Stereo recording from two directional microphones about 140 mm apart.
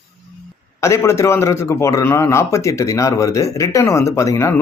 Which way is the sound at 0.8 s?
20° left (ahead or behind).